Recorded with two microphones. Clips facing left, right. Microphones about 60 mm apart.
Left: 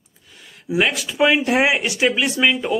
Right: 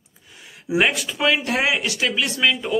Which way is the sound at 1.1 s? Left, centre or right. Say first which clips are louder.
Left 8 dB; left.